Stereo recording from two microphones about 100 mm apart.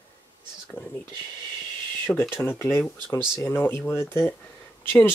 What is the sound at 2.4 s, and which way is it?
Speech, 25° left (ahead or behind).